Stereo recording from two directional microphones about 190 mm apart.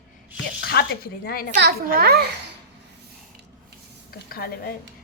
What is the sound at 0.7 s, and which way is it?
Speech, 60° left (ahead or behind).